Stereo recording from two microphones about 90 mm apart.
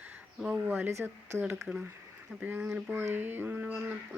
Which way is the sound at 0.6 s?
20° right (ahead or behind).